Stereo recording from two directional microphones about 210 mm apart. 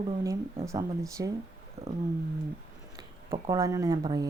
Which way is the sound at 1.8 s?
30° right (ahead or behind).